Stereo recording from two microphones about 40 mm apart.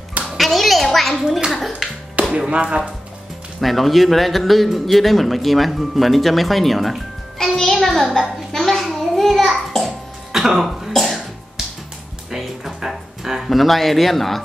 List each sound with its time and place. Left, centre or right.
0.4 s a sound: centre
1.5 s a man's voice: centre
2.2 s music: right
2.5 s speech: right
3.6 s a man's voice: centre
7.5 s music: centre
8.5 s a sound: centre
8.8 s child singing: centre
10.3 s speech: centre
10.9 s cough: centre
12.3 s music: centre